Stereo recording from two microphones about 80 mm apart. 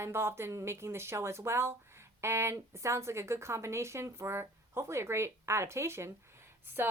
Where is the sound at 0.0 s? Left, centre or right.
Right.